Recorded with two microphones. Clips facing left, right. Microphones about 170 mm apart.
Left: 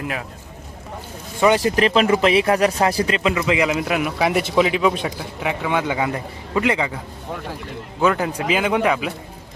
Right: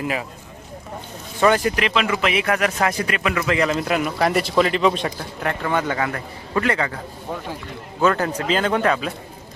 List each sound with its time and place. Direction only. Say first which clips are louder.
0.0 s speech: right 2 dB; centre (ahead or behind)
1.4 s a man's voice: left 1 dB; 20° left (ahead or behind)
1.8 s a man's voice: left 5 dB; 35° left (ahead or behind); by 7.0 s 15° left (ahead or behind)
8.0 s a man's voice: even; 10° left (ahead or behind)